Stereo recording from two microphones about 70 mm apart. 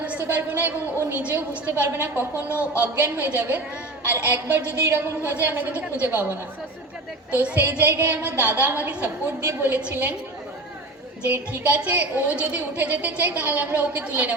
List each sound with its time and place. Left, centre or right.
0.0 s a sound: right
1.2 s a woman's voice: right
2.3 s speech: left
2.7 s a woman's voice: centre
7.3 s a woman's voice: right
11.2 s a woman's voice: right